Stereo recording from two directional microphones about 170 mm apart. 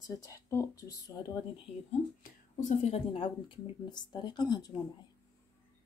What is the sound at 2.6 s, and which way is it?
Speech, 45° left (ahead or behind).